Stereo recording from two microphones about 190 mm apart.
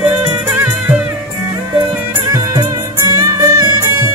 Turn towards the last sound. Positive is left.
turn(degrees=-20)  # may be behind; listen again after turning